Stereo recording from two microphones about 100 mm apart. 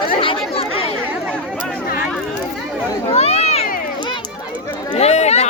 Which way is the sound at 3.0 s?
90° left.